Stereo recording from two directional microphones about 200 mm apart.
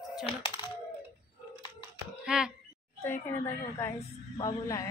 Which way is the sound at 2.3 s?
5° right (ahead or behind).